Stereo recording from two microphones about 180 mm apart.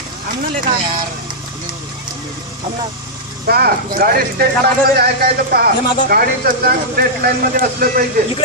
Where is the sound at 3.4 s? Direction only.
60° right (ahead or behind).